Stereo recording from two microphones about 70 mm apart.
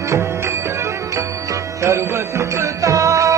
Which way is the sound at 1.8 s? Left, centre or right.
Right.